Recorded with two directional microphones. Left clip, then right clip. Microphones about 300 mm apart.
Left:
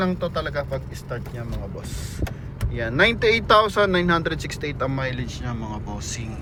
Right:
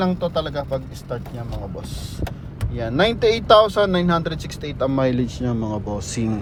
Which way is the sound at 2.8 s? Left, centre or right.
Centre.